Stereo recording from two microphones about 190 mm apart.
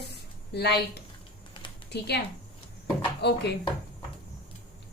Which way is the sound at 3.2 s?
60° left (ahead or behind).